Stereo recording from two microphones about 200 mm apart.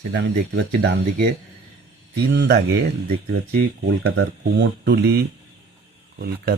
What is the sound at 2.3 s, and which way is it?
Speech, 55° right (ahead or behind).